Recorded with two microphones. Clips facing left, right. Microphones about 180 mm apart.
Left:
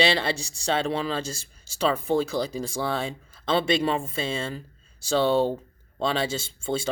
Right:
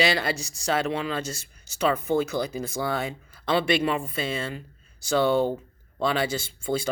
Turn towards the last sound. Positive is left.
turn(degrees=25)  # may be behind; listen again after turning